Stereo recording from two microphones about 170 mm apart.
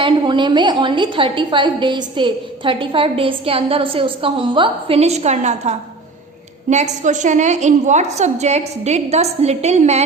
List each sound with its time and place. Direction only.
0.0 s a woman's voice: 30° right (ahead or behind)